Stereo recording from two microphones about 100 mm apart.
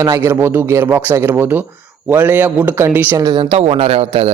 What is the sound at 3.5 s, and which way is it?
Speech, 75° right (ahead or behind).